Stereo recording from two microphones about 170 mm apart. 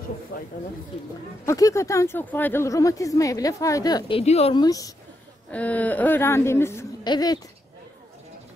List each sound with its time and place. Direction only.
0.3 s a sound: 60° left (ahead or behind)
1.4 s speech: 20° left (ahead or behind)
4.2 s speech: 35° left (ahead or behind)
4.6 s speech: 20° left (ahead or behind)
5.5 s a woman's voice: 10° left (ahead or behind); by 7.3 s 25° left (ahead or behind)